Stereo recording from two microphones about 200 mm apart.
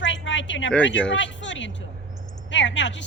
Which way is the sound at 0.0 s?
65° left (ahead or behind).